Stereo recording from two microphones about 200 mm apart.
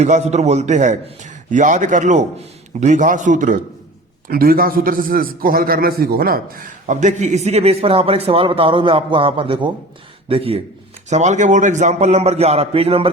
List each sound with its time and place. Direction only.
0.0 s a man's voice: 35° right (ahead or behind)